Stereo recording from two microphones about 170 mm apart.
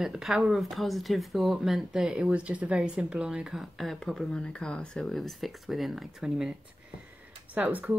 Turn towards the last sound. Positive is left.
turn(degrees=-10)  # may be behind; listen again after turning